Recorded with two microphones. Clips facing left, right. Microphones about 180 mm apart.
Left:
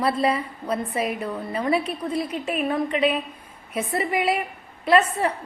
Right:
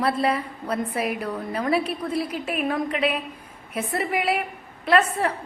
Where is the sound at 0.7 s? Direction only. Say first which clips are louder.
Even; 30° left (ahead or behind).